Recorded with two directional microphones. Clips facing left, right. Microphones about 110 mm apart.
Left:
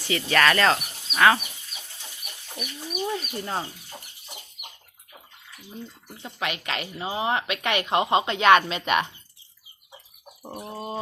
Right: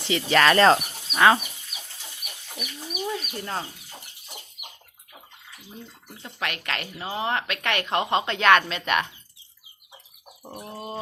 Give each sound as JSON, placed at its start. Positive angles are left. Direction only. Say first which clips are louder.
{"t": 0.0, "sound": "speech", "louder": "right 1 dB", "side_deg": -20}
{"t": 1.7, "sound": "chicken", "louder": "right 1 dB", "side_deg": -10}
{"t": 2.6, "sound": "speech", "louder": "left 2 dB", "side_deg": -5}
{"t": 6.2, "sound": "a woman's voice", "louder": "left 1 dB", "side_deg": 10}
{"t": 10.4, "sound": "a woman's voice", "louder": "left 2 dB", "side_deg": 10}